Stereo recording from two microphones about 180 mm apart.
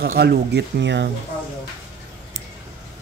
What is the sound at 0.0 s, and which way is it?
Speech, 60° right (ahead or behind).